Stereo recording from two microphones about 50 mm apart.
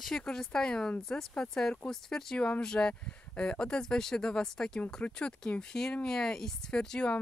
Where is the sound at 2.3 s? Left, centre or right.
Left.